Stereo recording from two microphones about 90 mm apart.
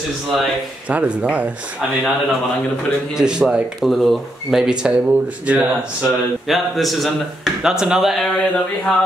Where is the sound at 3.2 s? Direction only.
10° right (ahead or behind).